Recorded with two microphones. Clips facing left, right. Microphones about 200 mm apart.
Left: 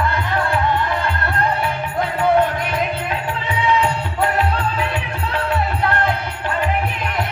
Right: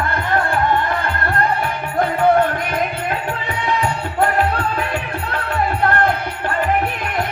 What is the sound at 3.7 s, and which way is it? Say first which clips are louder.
Music: left 2 dB; 50° right (ahead or behind).